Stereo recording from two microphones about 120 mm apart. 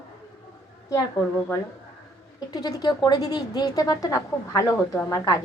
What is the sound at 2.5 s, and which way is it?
A woman's voice, 35° left (ahead or behind).